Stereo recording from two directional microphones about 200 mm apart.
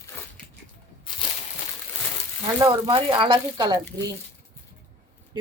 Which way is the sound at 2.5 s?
20° right (ahead or behind).